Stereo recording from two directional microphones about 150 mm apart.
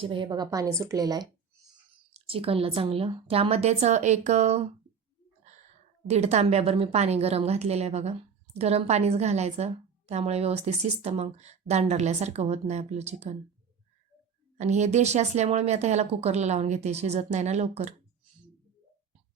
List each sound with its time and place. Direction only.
0.0 s a woman's voice: 35° right (ahead or behind)
2.1 s a woman's voice: 40° right (ahead or behind)
6.1 s a woman's voice: 45° right (ahead or behind)
14.6 s a woman's voice: 50° right (ahead or behind)